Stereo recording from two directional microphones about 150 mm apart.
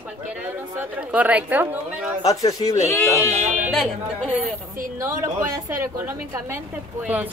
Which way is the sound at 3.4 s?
55° right (ahead or behind).